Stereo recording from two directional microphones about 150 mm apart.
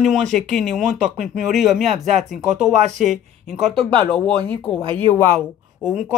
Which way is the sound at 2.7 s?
50° right (ahead or behind).